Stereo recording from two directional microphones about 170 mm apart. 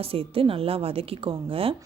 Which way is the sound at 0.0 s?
35° right (ahead or behind).